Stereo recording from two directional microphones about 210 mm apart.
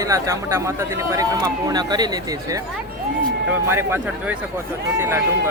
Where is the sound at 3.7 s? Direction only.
10° right (ahead or behind).